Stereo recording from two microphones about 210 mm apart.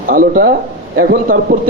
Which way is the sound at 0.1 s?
45° right (ahead or behind).